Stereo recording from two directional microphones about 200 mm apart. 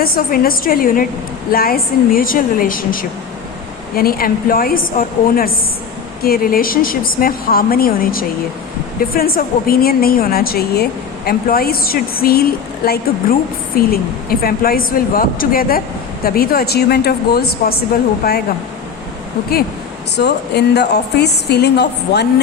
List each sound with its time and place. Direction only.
0.0 s a woman's voice: 45° left (ahead or behind)
20.1 s a woman's voice: 55° left (ahead or behind)